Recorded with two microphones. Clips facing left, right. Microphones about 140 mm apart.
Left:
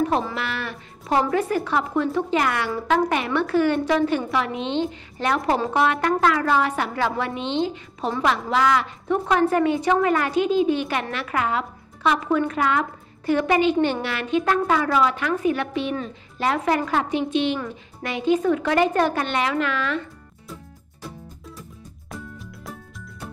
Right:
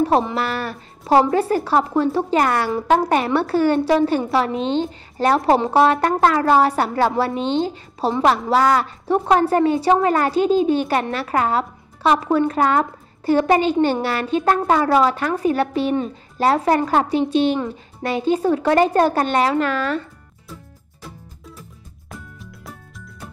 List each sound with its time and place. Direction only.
0.4 s a woman's voice: 40° right (ahead or behind)
22.1 s music: centre (ahead or behind)